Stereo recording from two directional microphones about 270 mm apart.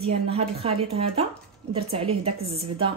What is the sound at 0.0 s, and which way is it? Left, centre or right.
Speech, right.